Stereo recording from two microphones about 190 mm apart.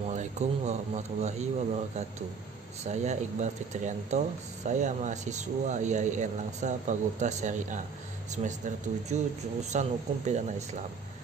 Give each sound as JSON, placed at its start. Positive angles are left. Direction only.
{"t": 0.1, "sound": "speech", "side_deg": -40}
{"t": 2.8, "sound": "speech", "side_deg": -35}